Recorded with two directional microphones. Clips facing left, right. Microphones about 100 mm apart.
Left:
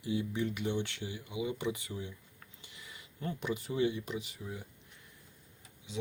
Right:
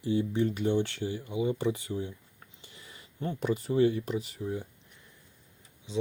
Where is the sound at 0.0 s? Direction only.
35° right (ahead or behind).